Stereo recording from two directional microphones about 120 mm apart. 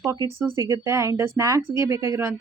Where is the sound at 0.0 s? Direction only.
25° right (ahead or behind).